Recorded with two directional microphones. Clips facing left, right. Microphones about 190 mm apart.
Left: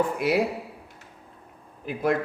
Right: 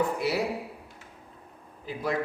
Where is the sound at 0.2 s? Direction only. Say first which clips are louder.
Left 5 dB; 50° left (ahead or behind).